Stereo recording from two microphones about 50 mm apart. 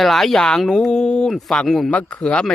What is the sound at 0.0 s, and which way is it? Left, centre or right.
Speech, centre.